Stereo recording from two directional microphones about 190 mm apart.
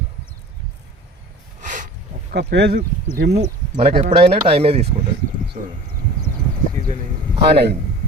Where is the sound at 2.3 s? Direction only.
60° right (ahead or behind).